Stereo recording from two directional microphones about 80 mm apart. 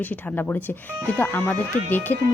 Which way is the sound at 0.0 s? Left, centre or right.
Left.